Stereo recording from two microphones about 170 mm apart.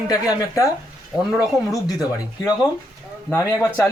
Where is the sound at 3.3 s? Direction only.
15° left (ahead or behind).